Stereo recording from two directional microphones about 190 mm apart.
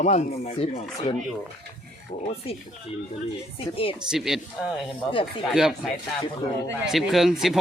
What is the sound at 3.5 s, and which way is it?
Speech, 30° left (ahead or behind).